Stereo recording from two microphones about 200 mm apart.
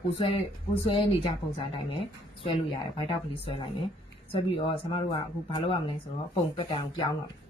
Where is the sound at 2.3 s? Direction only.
25° left (ahead or behind).